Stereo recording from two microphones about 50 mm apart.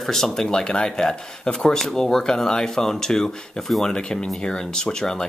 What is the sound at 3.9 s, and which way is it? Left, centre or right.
Speech, centre.